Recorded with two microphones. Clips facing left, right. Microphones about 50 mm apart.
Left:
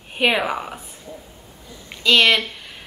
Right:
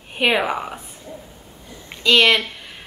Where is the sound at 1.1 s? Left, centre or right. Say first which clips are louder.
Right 1 dB; right.